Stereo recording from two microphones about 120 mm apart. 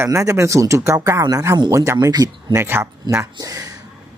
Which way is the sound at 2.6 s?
20° right (ahead or behind).